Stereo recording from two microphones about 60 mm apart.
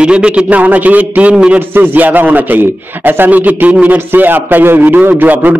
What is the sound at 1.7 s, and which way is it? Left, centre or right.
A man's voice, right.